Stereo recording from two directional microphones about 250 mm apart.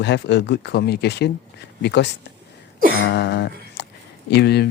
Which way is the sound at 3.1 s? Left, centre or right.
Left.